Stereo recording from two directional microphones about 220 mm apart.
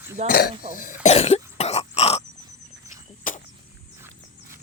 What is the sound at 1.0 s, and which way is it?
Throat clearing, 30° left (ahead or behind).